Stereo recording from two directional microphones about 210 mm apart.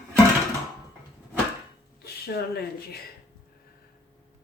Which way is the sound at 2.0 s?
50° left (ahead or behind).